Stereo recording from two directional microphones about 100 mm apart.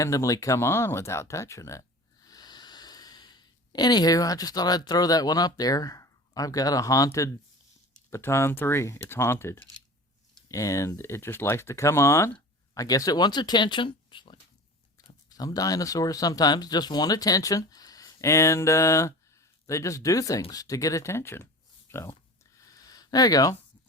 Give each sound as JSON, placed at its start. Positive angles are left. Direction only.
{"t": 0.0, "sound": "speech", "side_deg": 35}
{"t": 2.2, "sound": "speech", "side_deg": 40}
{"t": 15.3, "sound": "speech", "side_deg": 40}
{"t": 22.5, "sound": "a sound", "side_deg": 35}